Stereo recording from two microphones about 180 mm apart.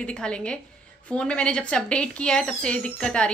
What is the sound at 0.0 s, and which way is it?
Speech, 5° left (ahead or behind).